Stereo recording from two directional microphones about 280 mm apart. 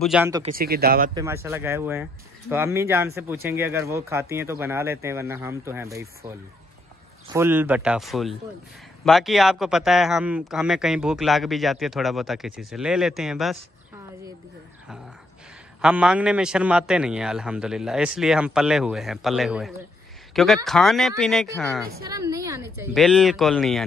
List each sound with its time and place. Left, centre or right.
0.0 s speech: centre
0.6 s speech: right
1.1 s speech: centre
7.3 s speech: centre
15.8 s speech: centre
22.1 s speech: centre